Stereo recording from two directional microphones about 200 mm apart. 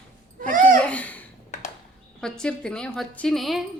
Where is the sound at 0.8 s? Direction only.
5° left (ahead or behind).